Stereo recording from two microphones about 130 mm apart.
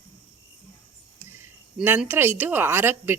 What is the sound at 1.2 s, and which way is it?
Speech, 15° right (ahead or behind).